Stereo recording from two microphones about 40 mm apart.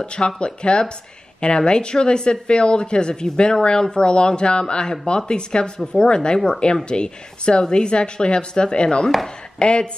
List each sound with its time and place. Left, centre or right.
0.0 s speech: left